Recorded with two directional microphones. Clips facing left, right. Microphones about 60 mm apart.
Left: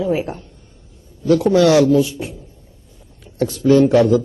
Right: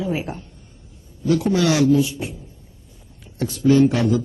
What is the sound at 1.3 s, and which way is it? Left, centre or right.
Speech, right.